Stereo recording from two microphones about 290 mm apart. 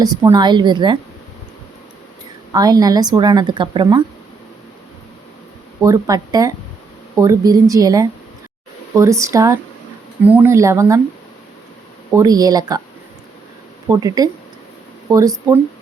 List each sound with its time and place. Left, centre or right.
0.0 s speech: centre
2.5 s speech: centre
5.8 s speech: centre
12.1 s speech: centre
13.9 s speech: centre